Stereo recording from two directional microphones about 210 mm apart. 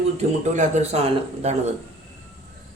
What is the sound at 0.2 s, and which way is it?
Speech, 35° right (ahead or behind).